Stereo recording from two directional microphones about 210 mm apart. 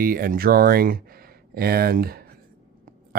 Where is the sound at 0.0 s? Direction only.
40° right (ahead or behind).